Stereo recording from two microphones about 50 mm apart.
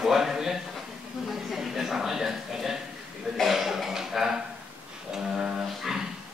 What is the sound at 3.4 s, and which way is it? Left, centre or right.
Cough, centre.